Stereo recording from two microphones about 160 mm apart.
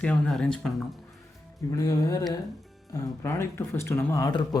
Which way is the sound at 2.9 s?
15° left (ahead or behind).